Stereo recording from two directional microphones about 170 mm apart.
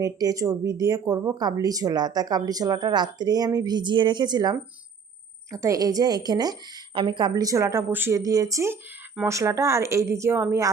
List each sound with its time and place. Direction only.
0.0 s a woman's voice: 20° right (ahead or behind)